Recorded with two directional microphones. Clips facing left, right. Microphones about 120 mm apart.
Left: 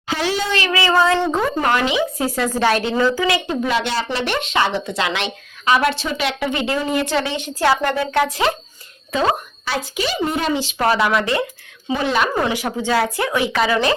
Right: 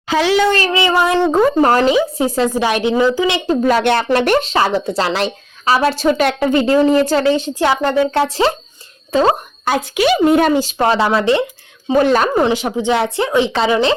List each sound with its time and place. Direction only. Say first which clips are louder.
0.2 s speech: right 8 dB; 90° right
0.4 s speech: right 7 dB; 45° right (ahead or behind)
0.7 s a sound: right 2 dB; 20° right (ahead or behind)
1.3 s a woman's voice: right 7 dB; 40° right (ahead or behind)
2.1 s a woman's voice: right 5 dB; 25° right (ahead or behind)
2.5 s a woman's voice: right 2 dB; 15° right (ahead or behind); by 4.4 s 55° right (ahead or behind)
4.4 s a woman's voice: right 4 dB; 35° right (ahead or behind)
7.6 s a woman's voice: right 1 dB; 25° right (ahead or behind)
9.9 s speech: right 11 dB; 65° right (ahead or behind); by 10.8 s 45° right (ahead or behind)
10.8 s a woman's voice: right 3 dB; 30° right (ahead or behind)
11.9 s a woman's voice: right 6 dB; 45° right (ahead or behind)
12.4 s a woman's voice: right 5 dB; 25° right (ahead or behind)